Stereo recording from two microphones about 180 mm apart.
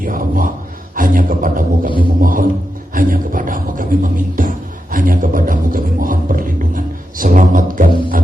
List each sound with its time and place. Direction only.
0.0 s a sound: 50° right (ahead or behind)
0.9 s speech: 50° right (ahead or behind)
2.0 s didgeridoo: 50° right (ahead or behind)
2.9 s beatboxing: 50° right (ahead or behind)